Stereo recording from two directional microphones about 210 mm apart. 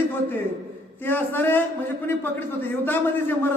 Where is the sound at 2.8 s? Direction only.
10° left (ahead or behind).